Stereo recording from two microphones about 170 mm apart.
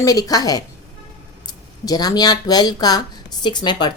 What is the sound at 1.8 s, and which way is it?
Speech, 25° left (ahead or behind).